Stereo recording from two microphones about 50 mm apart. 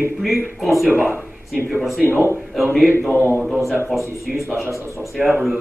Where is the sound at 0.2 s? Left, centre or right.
Centre.